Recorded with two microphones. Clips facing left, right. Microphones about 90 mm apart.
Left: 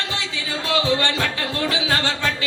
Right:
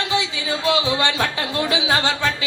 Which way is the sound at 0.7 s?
15° right (ahead or behind).